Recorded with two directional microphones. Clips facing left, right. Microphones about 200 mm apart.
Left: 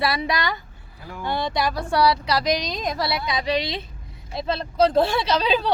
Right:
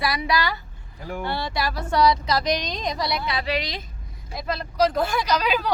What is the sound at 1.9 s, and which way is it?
Speech, 10° left (ahead or behind).